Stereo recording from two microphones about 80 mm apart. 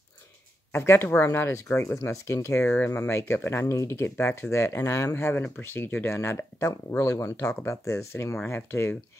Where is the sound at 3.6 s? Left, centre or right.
Left.